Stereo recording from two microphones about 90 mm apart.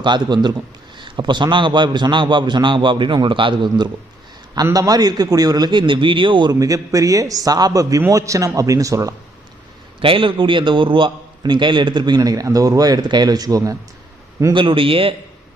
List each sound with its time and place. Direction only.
0.0 s a man's voice: 55° right (ahead or behind)
4.5 s a man's voice: 40° right (ahead or behind); by 6.6 s 60° right (ahead or behind)
6.6 s a man's voice: 40° right (ahead or behind)
10.0 s a man's voice: 75° right (ahead or behind); by 13.7 s 40° right (ahead or behind)
14.5 s speech: 70° right (ahead or behind)